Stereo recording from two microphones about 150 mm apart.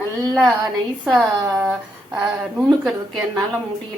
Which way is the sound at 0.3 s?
Centre (ahead or behind).